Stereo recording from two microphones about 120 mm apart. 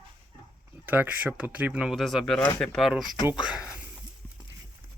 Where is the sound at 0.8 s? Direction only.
15° right (ahead or behind); by 2.9 s 5° left (ahead or behind).